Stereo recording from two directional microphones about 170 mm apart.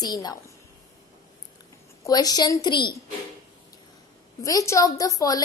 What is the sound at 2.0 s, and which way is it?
Speech, 20° left (ahead or behind).